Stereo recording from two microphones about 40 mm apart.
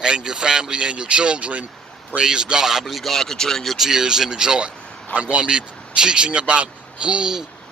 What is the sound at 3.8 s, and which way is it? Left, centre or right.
Speech, centre.